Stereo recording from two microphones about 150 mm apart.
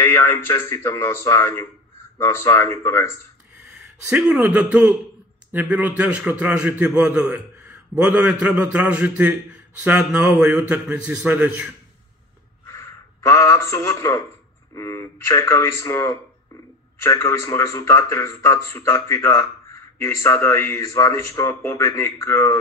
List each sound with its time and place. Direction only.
0.0 s a man's voice: 15° left (ahead or behind)
4.1 s a man's voice: 5° right (ahead or behind)
12.6 s a man's voice: 20° left (ahead or behind)